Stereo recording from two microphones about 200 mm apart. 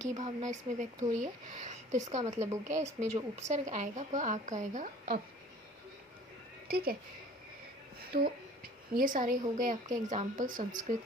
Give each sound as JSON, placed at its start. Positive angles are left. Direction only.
{"t": 0.1, "sound": "speech", "side_deg": -35}
{"t": 2.4, "sound": "speech", "side_deg": -15}
{"t": 3.3, "sound": "speech", "side_deg": -35}
{"t": 6.7, "sound": "a woman's voice", "side_deg": -50}
{"t": 8.1, "sound": "a woman's voice", "side_deg": -50}